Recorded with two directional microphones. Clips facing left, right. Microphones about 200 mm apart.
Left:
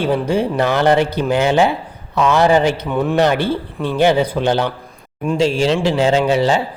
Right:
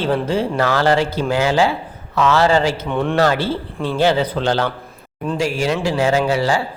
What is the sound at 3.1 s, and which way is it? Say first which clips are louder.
A man's voice: left 2 dB; 15° left (ahead or behind).